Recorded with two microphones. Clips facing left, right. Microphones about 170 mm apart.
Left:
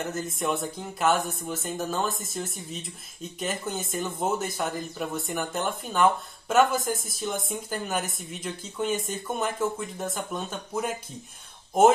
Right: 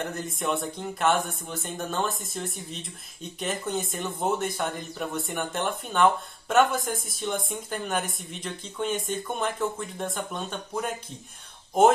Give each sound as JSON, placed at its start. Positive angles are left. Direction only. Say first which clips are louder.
{"t": 0.0, "sound": "speech", "louder": "left 1 dB", "side_deg": 0}